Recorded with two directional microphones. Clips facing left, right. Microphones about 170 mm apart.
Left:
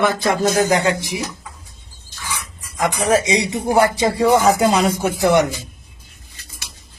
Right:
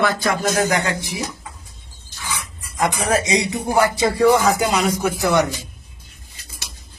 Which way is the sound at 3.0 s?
30° left (ahead or behind).